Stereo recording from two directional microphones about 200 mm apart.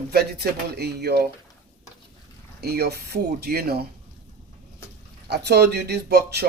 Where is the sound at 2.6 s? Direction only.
50° right (ahead or behind).